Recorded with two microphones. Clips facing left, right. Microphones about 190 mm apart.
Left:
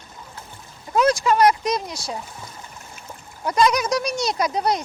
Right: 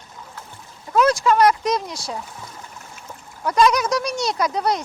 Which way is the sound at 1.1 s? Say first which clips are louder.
Right 1 dB; 15° left (ahead or behind).